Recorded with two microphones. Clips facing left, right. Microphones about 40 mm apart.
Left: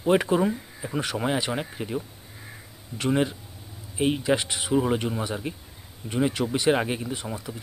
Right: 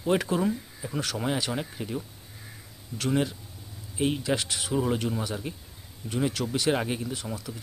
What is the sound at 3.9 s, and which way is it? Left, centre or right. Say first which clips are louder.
Speech: left 3 dB; centre.